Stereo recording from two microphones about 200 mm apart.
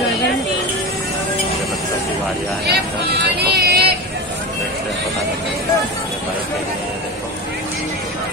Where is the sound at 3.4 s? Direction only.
55° right (ahead or behind).